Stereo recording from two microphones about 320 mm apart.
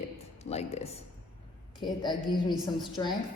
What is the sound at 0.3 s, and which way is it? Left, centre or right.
A woman's voice, centre.